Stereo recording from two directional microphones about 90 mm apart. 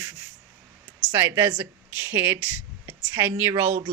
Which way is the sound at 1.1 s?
25° right (ahead or behind).